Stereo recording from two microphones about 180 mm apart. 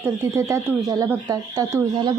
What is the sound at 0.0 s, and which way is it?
Speech, 15° right (ahead or behind).